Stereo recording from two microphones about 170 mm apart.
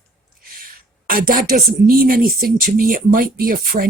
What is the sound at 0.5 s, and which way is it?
A woman's voice, 55° right (ahead or behind).